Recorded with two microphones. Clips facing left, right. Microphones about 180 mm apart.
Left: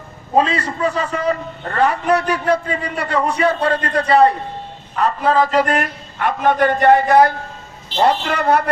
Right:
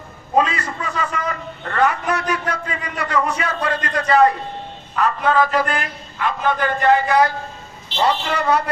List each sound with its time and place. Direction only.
0.3 s a man's voice: 30° left (ahead or behind)
5.8 s a woman's voice: 50° left (ahead or behind)